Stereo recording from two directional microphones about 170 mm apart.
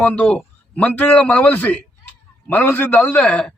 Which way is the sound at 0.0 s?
5° left (ahead or behind).